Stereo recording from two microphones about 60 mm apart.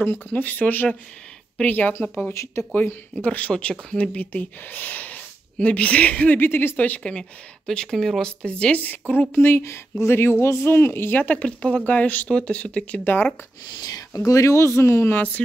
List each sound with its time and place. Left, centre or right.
0.3 s speech: left
3.3 s speech: left
6.4 s speech: left
7.0 s speech: centre
8.8 s speech: left
13.0 s speech: left
13.8 s speech: left
14.8 s speech: left
15.1 s speech: left